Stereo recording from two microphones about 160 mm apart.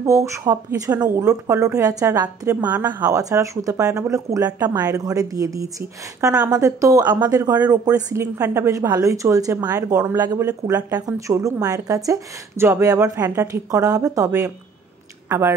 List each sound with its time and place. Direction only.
0.0 s a woman's voice: 20° right (ahead or behind)
2.2 s a woman's voice: 10° right (ahead or behind)